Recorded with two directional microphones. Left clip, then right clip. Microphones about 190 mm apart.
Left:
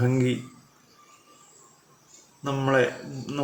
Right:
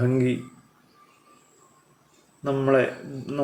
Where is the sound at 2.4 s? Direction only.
15° left (ahead or behind).